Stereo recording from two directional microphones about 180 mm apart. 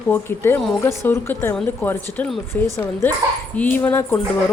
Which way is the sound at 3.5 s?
10° left (ahead or behind).